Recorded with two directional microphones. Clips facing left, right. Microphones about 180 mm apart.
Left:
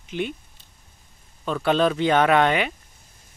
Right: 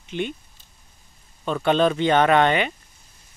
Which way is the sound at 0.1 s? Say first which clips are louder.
Even; 5° left (ahead or behind).